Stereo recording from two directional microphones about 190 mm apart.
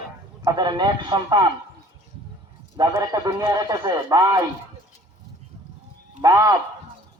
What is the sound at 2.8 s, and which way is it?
A man's voice, 20° right (ahead or behind).